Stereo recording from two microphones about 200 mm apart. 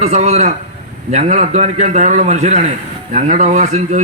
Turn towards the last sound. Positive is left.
turn(degrees=-35)  # may be behind; listen again after turning